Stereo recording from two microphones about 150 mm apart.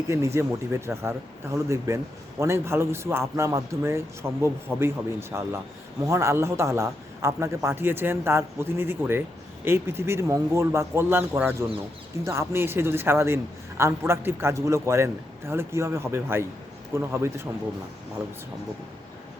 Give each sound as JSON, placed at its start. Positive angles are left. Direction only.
{"t": 0.1, "sound": "a man's voice", "side_deg": -20}